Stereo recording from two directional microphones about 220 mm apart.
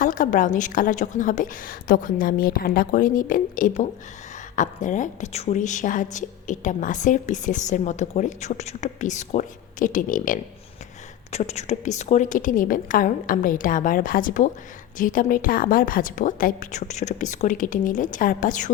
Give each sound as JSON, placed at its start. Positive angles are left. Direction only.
{"t": 0.0, "sound": "a woman's voice", "side_deg": 35}